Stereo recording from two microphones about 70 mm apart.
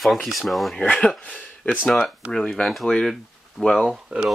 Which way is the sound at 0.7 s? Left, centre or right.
Centre.